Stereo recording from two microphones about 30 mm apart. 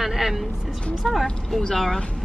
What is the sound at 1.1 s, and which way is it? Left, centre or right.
Speech, centre.